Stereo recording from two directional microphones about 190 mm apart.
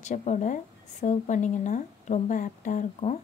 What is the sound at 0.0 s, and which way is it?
A woman's voice, 40° left (ahead or behind).